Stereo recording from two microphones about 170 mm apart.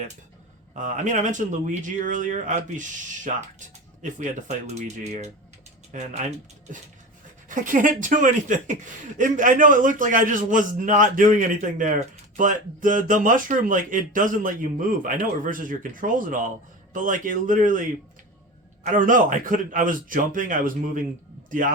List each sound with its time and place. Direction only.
0.8 s speech: 45° right (ahead or behind)